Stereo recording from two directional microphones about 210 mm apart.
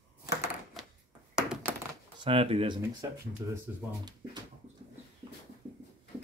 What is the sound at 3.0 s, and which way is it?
Speech, 15° right (ahead or behind).